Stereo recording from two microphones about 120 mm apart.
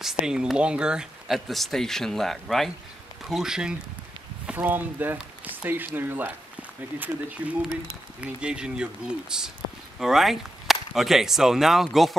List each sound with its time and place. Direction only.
0.0 s speech: 5° right (ahead or behind)
4.5 s speech: 15° right (ahead or behind)